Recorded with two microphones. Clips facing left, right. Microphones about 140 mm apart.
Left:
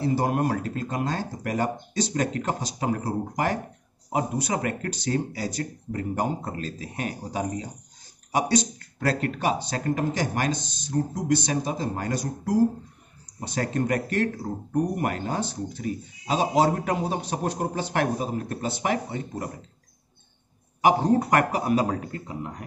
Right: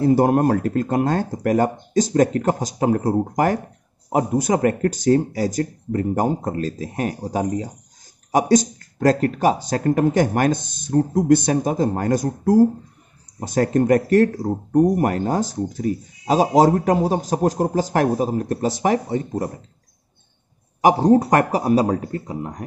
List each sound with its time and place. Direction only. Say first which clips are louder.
0.0 s speech: right 8 dB; 50° right (ahead or behind)
20.8 s speech: right 6 dB; 40° right (ahead or behind)